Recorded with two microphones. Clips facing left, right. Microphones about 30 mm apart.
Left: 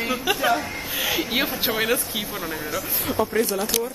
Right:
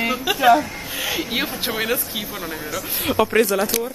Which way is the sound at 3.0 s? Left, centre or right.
Right.